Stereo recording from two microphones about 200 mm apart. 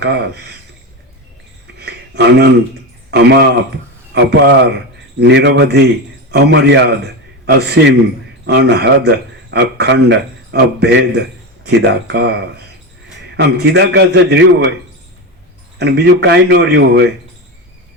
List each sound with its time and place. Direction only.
0.0 s a man's voice: 55° right (ahead or behind)
1.8 s a sound: 55° right (ahead or behind)
3.1 s a man's voice: 60° right (ahead or behind)
15.8 s a man's voice: 55° right (ahead or behind)